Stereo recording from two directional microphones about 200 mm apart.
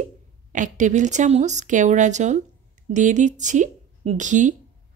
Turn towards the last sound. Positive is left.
turn(degrees=-40)  # may be behind; listen again after turning